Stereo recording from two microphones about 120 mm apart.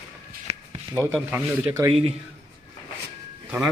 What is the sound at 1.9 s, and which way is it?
Speech, 55° right (ahead or behind).